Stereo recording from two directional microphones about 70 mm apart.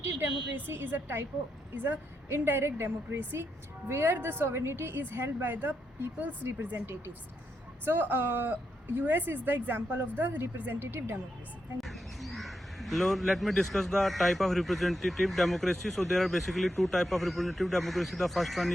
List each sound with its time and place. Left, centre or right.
0.2 s a woman's voice: right
7.9 s a woman's voice: right
11.8 s speech: centre